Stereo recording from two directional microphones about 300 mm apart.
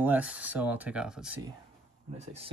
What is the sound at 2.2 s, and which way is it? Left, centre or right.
Speech, right.